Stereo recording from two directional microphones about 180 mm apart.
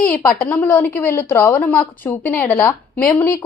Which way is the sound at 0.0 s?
5° left (ahead or behind).